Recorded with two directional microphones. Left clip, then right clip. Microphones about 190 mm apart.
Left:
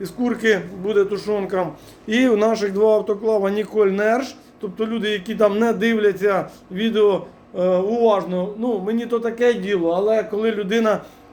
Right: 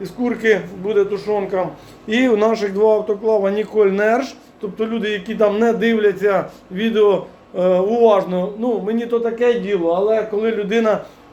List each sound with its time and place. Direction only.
0.0 s a man's voice: 15° left (ahead or behind)
2.0 s a man's voice: 10° left (ahead or behind)
8.7 s a man's voice: 10° left (ahead or behind)